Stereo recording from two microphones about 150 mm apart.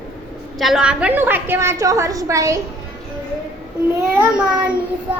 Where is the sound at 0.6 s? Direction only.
5° right (ahead or behind); by 2.6 s 20° right (ahead or behind).